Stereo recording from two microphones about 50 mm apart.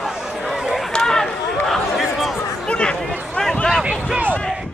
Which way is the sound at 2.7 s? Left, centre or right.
Centre.